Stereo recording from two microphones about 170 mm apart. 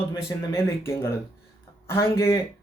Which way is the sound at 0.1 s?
15° left (ahead or behind).